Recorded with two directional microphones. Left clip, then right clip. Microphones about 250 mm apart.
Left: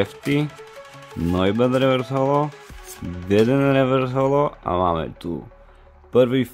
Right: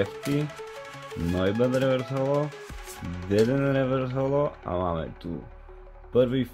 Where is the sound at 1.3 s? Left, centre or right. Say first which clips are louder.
Left 5 dB; left.